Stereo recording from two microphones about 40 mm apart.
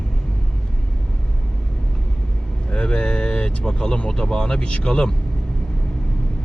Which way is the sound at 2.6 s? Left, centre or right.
Left.